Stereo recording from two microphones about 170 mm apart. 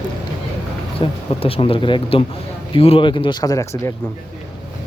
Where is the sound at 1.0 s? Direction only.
35° left (ahead or behind).